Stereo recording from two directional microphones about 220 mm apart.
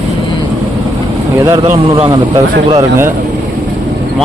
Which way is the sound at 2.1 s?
20° right (ahead or behind).